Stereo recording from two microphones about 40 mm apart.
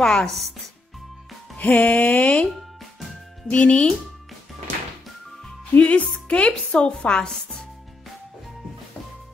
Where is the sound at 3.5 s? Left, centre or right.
Left.